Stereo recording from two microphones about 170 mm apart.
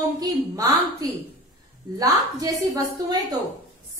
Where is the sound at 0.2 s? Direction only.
20° right (ahead or behind).